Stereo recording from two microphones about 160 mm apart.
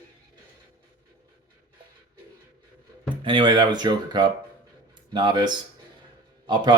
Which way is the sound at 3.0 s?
30° right (ahead or behind).